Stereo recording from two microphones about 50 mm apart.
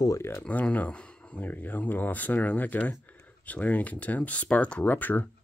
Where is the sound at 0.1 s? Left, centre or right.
Left.